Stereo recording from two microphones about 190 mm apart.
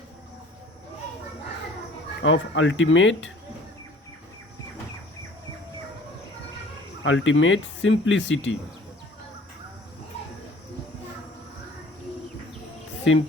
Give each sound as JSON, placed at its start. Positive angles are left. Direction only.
{"t": 2.2, "sound": "speech", "side_deg": 80}
{"t": 7.0, "sound": "speech", "side_deg": 90}